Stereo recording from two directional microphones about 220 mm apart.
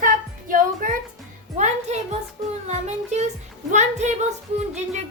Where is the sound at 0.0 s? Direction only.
40° right (ahead or behind).